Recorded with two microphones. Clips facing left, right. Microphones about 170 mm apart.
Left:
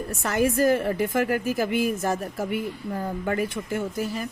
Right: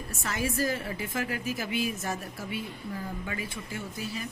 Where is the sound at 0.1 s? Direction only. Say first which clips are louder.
Left 8 dB; 55° left (ahead or behind).